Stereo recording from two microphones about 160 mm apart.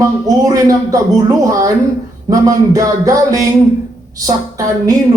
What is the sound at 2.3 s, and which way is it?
A man's voice, 20° right (ahead or behind).